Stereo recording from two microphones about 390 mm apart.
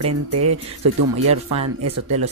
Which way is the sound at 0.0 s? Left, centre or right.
Right.